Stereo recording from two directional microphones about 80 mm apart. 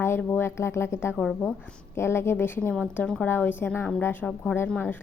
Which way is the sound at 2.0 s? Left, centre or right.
Left.